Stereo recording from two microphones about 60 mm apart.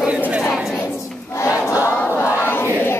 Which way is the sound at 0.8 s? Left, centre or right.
Left.